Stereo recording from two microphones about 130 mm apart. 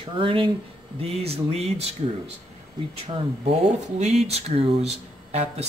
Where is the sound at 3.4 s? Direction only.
60° right (ahead or behind).